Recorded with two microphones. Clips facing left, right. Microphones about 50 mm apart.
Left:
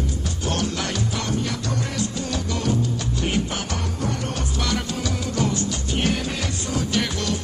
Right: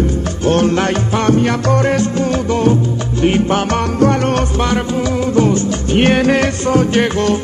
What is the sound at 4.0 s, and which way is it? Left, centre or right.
Music, right.